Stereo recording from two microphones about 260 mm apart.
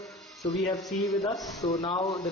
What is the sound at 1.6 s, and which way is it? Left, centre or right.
Speech, centre.